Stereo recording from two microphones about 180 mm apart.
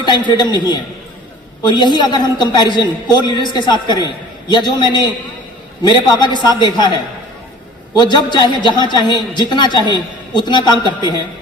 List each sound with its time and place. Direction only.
0.0 s a woman's voice: 25° left (ahead or behind)
7.9 s a woman's voice: 25° left (ahead or behind)